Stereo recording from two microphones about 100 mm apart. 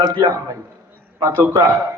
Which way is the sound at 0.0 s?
45° right (ahead or behind).